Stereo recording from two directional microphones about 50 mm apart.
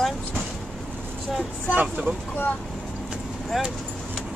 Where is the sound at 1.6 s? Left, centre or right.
Right.